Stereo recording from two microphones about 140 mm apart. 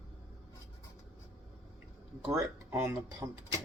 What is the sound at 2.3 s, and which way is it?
Speech, 20° right (ahead or behind).